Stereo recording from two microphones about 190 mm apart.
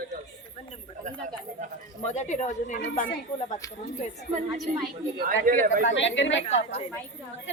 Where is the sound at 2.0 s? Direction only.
40° left (ahead or behind).